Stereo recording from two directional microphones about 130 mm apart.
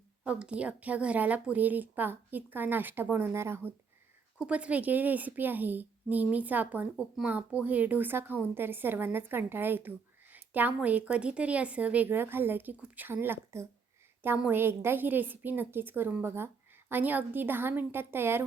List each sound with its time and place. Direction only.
0.3 s speech: 10° right (ahead or behind)
4.4 s speech: 10° right (ahead or behind)